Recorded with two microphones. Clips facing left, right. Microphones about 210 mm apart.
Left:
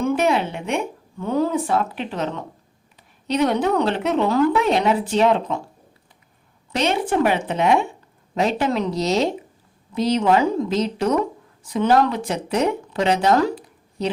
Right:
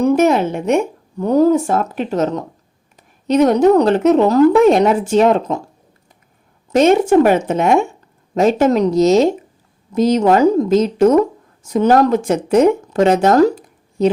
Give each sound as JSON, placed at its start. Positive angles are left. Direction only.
{"t": 0.0, "sound": "speech", "side_deg": -40}
{"t": 6.7, "sound": "speech", "side_deg": -45}